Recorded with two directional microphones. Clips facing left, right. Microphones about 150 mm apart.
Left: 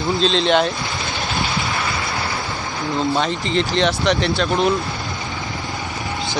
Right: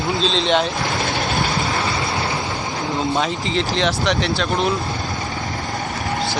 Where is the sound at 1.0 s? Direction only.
50° right (ahead or behind).